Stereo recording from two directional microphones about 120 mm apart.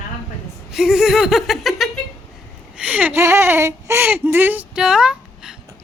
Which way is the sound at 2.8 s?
15° right (ahead or behind).